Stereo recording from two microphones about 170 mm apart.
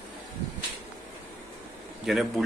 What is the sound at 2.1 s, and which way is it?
Speech, centre (ahead or behind).